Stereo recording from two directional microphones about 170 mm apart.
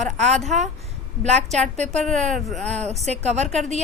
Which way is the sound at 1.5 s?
40° right (ahead or behind).